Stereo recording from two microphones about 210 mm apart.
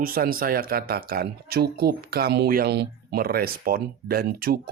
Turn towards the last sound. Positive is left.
turn(degrees=-45)  # may be behind; listen again after turning